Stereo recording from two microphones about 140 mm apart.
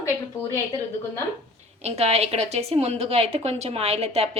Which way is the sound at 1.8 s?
45° right (ahead or behind).